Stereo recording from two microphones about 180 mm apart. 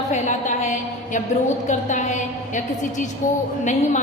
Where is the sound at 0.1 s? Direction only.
40° left (ahead or behind).